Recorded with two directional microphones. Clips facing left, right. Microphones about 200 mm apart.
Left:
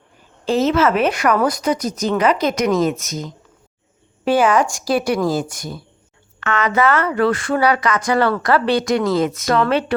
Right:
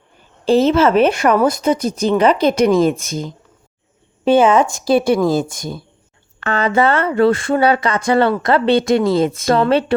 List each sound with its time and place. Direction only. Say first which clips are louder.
0.4 s speech: right 4 dB; 30° right (ahead or behind)